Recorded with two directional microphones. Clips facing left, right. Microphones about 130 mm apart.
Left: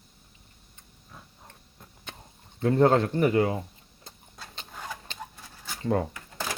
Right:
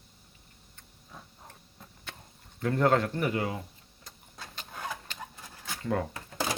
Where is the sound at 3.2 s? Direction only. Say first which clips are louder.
Left 7 dB; 40° left (ahead or behind).